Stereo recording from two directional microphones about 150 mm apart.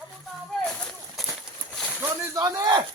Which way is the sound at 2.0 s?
25° right (ahead or behind).